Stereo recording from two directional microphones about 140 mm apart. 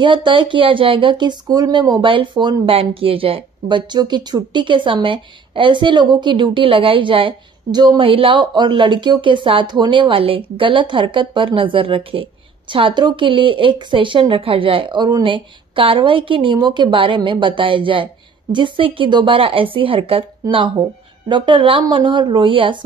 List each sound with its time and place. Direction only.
0.0 s speech: 35° right (ahead or behind)